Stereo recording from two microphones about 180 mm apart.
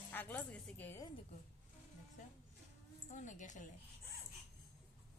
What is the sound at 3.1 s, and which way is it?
Speech, 45° left (ahead or behind).